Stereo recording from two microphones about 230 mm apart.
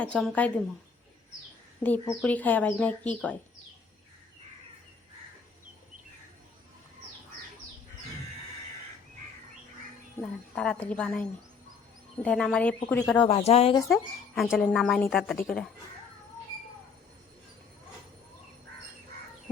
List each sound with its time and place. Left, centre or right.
0.0 s speech: centre
1.8 s speech: centre
10.5 s speech: centre
13.1 s speech: left
13.8 s speech: centre